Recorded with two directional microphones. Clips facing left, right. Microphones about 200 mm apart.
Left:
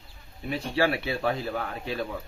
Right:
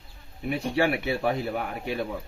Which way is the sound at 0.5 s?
15° right (ahead or behind).